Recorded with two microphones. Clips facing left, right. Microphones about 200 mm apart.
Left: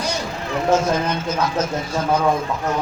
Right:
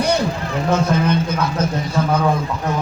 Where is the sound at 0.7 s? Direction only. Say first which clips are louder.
Right 1 dB; 60° right (ahead or behind).